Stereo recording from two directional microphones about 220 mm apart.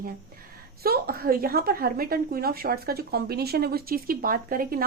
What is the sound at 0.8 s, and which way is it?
Speech, 45° right (ahead or behind).